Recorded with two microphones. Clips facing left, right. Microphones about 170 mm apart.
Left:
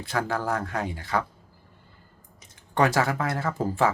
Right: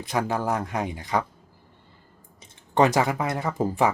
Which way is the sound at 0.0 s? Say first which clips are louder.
Right 2 dB; 15° right (ahead or behind).